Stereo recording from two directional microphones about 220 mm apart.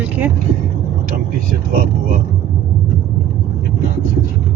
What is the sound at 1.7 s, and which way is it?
Speech, 40° right (ahead or behind).